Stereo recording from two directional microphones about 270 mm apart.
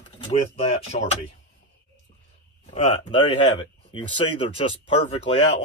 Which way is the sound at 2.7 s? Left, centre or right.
Left.